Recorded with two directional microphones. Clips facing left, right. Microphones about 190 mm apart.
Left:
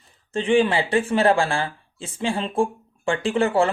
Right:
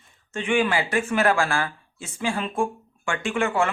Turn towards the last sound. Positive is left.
turn(degrees=35)  # may be behind; listen again after turning